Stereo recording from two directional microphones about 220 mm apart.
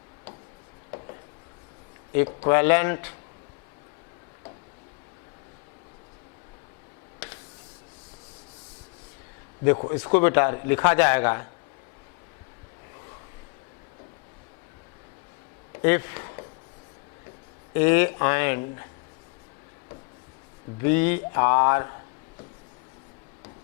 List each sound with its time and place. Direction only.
2.5 s a man's voice: 15° left (ahead or behind)
9.7 s speech: 25° left (ahead or behind)
10.0 s a man's voice: 15° left (ahead or behind)
15.8 s a sound: 15° left (ahead or behind)
17.7 s a man's voice: 15° left (ahead or behind)
20.8 s a man's voice: 15° left (ahead or behind)